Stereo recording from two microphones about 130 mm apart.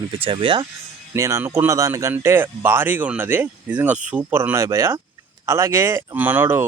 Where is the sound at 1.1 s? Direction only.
20° right (ahead or behind).